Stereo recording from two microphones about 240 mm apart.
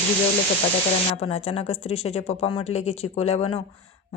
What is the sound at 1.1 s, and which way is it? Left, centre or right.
Speech, left.